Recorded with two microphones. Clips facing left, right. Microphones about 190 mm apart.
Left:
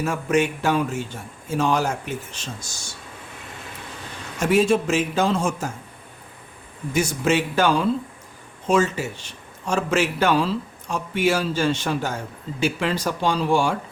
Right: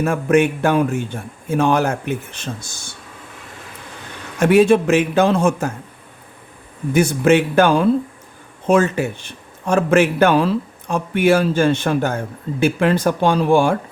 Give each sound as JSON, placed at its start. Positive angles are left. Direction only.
{"t": 0.0, "sound": "a man's voice", "side_deg": -55}
{"t": 4.4, "sound": "a man's voice", "side_deg": -65}
{"t": 6.9, "sound": "a man's voice", "side_deg": -55}